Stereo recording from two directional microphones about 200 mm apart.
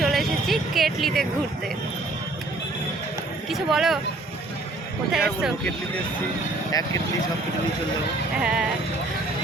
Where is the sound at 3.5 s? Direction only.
Centre (ahead or behind).